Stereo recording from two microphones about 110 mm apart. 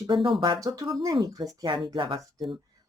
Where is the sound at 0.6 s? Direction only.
30° right (ahead or behind).